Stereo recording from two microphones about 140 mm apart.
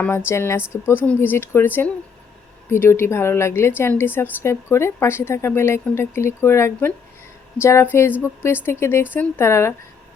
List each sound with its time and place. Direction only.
0.3 s a woman's voice: 20° left (ahead or behind)